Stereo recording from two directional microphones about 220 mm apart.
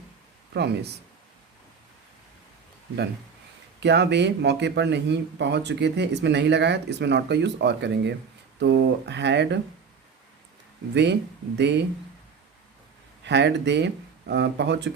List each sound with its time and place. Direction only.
0.5 s speech: 50° right (ahead or behind)
3.8 s speech: 50° right (ahead or behind)
10.9 s speech: 50° right (ahead or behind)
13.2 s speech: 50° right (ahead or behind)